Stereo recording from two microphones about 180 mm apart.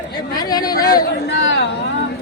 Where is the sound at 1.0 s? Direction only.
70° left (ahead or behind).